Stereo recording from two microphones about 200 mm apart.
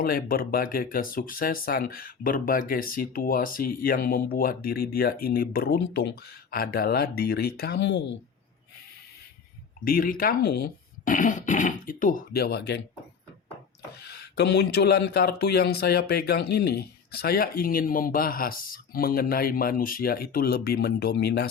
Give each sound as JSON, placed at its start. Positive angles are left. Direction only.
{"t": 0.0, "sound": "speech", "side_deg": 50}
{"t": 9.8, "sound": "speech", "side_deg": 45}
{"t": 14.0, "sound": "speech", "side_deg": 55}